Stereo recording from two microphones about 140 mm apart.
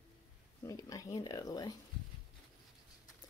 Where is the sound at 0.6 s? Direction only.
25° left (ahead or behind).